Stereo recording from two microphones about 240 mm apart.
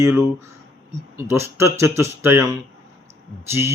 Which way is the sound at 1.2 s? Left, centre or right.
Centre.